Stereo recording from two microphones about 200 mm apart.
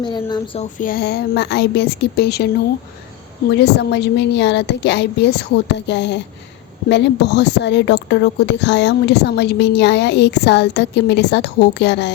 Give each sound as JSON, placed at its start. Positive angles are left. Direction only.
{"t": 0.0, "sound": "speech", "side_deg": 20}
{"t": 0.8, "sound": "speech", "side_deg": 50}
{"t": 3.5, "sound": "speech", "side_deg": 55}